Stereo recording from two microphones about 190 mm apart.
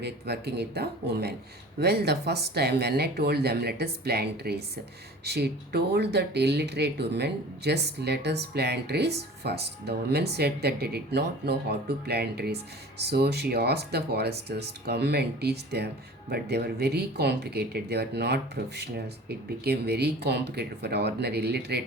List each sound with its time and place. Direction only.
0.0 s speech: 60° right (ahead or behind)